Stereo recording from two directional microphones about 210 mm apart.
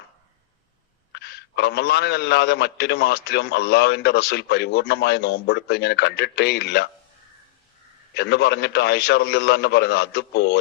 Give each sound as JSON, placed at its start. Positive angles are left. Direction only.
{"t": 1.1, "sound": "a man's voice", "side_deg": 50}
{"t": 8.1, "sound": "a man's voice", "side_deg": 50}